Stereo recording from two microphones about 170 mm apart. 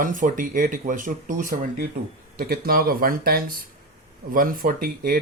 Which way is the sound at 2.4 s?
60° right (ahead or behind).